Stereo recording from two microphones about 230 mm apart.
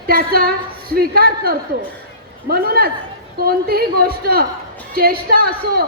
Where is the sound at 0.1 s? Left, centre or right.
Right.